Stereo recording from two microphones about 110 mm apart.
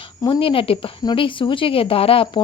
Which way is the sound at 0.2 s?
50° left (ahead or behind).